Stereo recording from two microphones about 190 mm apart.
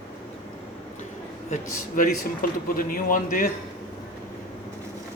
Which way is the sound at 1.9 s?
45° left (ahead or behind).